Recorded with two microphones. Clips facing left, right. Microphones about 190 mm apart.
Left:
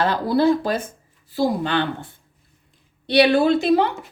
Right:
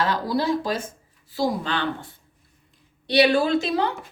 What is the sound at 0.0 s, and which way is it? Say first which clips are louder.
Speech: left 5 dB; 60° left (ahead or behind).